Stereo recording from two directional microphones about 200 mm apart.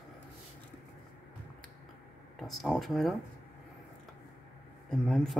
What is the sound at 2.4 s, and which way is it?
Speech, centre (ahead or behind).